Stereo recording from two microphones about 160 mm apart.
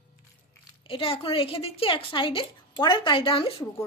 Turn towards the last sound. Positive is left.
turn(degrees=35)  # may be behind; listen again after turning